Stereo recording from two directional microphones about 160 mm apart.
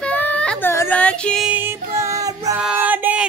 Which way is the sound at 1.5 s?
10° right (ahead or behind).